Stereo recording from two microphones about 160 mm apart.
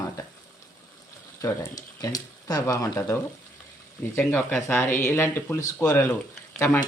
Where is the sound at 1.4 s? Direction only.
20° left (ahead or behind).